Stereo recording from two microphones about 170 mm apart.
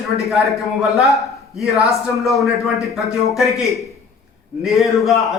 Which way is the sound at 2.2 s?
Centre (ahead or behind).